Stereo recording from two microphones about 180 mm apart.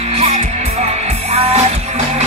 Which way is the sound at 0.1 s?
35° right (ahead or behind).